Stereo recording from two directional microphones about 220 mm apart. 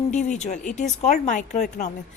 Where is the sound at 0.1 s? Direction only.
30° left (ahead or behind).